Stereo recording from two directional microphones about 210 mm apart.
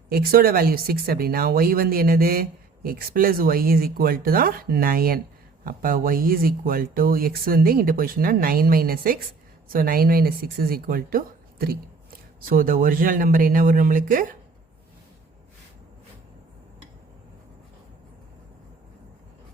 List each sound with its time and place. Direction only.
0.1 s speech: 45° right (ahead or behind)